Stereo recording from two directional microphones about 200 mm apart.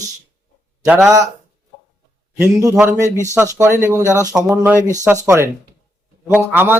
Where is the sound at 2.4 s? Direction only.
15° right (ahead or behind).